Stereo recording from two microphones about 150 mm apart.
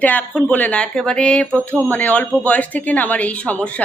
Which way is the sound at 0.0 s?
10° left (ahead or behind).